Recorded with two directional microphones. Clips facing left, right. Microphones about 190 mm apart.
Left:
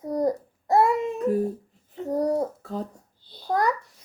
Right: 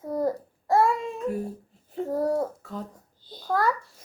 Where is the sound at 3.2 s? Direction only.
45° right (ahead or behind).